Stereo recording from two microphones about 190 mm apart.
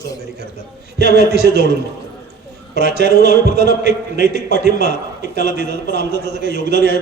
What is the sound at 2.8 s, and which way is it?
Speech, 60° right (ahead or behind).